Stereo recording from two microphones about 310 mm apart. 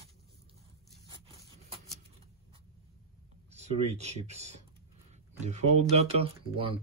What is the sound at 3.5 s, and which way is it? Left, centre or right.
Speech, right.